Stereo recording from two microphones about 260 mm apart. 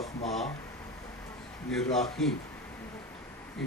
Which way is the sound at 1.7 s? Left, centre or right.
Centre.